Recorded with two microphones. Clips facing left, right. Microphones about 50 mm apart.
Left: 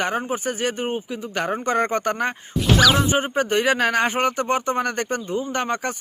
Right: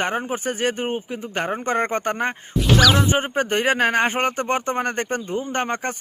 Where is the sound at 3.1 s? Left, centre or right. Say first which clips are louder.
Even; right.